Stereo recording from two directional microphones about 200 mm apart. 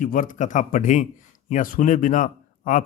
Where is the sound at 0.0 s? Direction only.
45° left (ahead or behind).